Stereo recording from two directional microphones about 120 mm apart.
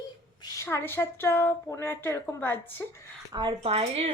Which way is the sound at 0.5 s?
20° left (ahead or behind).